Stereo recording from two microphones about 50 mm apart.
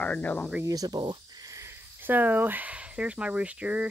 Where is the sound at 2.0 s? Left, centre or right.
Right.